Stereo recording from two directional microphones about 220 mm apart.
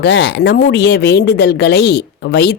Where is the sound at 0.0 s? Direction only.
50° left (ahead or behind).